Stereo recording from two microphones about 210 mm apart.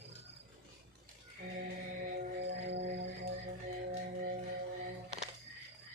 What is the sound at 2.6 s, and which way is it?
Music, 55° right (ahead or behind).